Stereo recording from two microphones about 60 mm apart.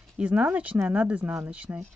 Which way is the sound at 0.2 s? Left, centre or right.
Right.